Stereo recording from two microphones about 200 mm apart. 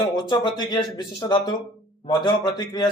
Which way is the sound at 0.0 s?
20° left (ahead or behind).